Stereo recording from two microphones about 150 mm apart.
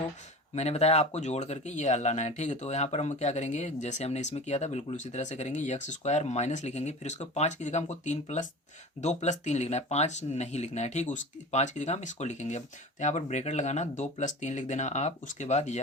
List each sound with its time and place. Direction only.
0.5 s speech: 45° left (ahead or behind)